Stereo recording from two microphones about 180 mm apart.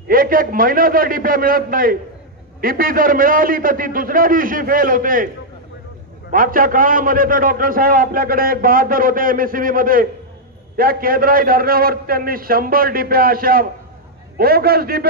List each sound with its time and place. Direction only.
0.1 s a man's voice: 50° right (ahead or behind)
6.3 s a man's voice: 50° right (ahead or behind)